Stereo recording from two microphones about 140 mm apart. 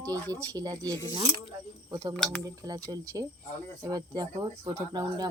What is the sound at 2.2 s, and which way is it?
Speech, 10° left (ahead or behind).